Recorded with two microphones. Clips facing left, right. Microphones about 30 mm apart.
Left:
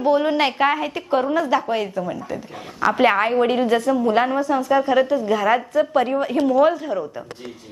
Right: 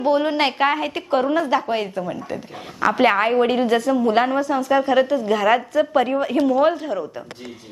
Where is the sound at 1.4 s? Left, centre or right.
Centre.